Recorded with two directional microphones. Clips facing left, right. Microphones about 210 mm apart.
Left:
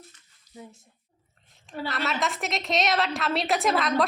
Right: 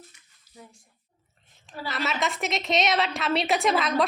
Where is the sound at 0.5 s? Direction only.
15° left (ahead or behind).